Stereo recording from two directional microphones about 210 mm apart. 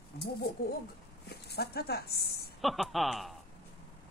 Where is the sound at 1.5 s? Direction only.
50° left (ahead or behind).